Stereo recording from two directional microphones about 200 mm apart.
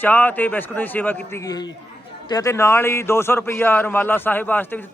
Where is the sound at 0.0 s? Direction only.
10° left (ahead or behind).